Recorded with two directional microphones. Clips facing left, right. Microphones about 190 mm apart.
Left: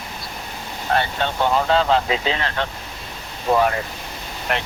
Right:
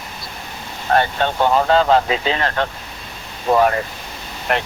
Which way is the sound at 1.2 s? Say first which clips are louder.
Right 3 dB; 50° right (ahead or behind).